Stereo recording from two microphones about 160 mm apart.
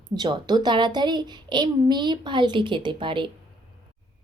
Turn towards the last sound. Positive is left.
turn(degrees=-30)  # may be behind; listen again after turning